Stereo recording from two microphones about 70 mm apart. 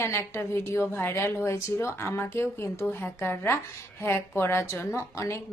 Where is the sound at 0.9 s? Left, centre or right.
Left.